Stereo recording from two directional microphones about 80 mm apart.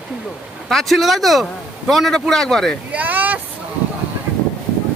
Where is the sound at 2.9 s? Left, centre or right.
Right.